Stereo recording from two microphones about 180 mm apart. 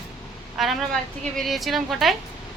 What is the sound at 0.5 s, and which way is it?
A woman's voice, centre (ahead or behind).